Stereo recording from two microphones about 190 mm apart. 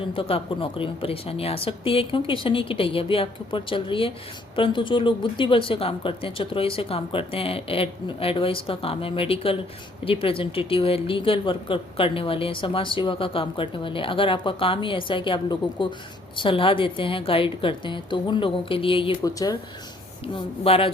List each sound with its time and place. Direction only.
0.1 s speech: 30° left (ahead or behind)
20.2 s speech: 30° left (ahead or behind)